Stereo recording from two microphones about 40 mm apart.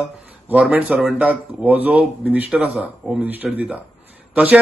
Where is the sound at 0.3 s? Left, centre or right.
Right.